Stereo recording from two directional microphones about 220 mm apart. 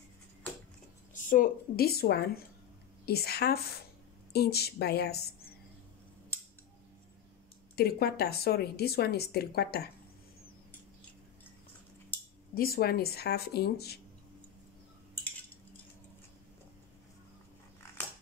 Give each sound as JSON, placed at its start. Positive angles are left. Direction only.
{"t": 1.1, "sound": "speech", "side_deg": 35}
{"t": 7.7, "sound": "speech", "side_deg": 45}
{"t": 12.5, "sound": "speech", "side_deg": 40}